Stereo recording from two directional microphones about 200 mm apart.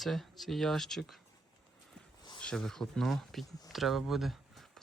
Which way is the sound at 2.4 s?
5° left (ahead or behind).